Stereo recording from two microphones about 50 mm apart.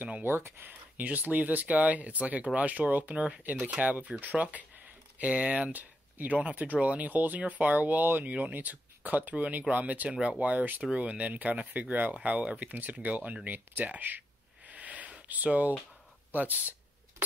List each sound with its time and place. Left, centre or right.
0.2 s speech: right
0.7 s speech: right
14.7 s a sound: right
16.3 s speech: right